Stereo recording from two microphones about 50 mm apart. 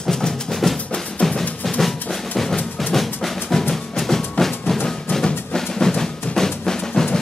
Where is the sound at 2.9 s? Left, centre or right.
Centre.